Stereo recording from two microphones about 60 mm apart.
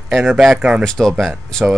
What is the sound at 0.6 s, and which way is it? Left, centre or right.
Speech, right.